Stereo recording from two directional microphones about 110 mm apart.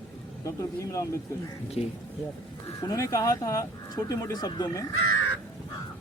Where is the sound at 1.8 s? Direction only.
75° left (ahead or behind).